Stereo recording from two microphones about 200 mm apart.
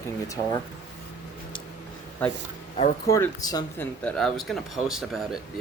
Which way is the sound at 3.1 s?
15° left (ahead or behind).